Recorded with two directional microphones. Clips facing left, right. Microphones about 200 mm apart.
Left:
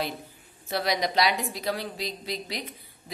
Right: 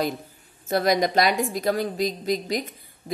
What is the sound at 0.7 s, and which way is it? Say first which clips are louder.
A woman's voice: right 6 dB; 45° right (ahead or behind).